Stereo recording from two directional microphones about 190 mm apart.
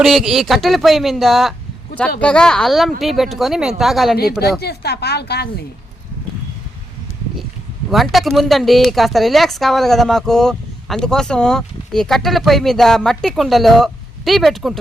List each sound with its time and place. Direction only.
0.0 s speech: centre (ahead or behind)
4.2 s speech: 55° left (ahead or behind)
7.9 s speech: centre (ahead or behind)